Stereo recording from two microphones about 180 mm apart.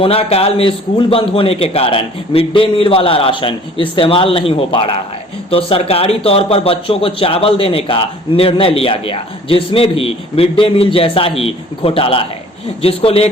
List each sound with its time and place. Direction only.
0.0 s speech: 30° left (ahead or behind)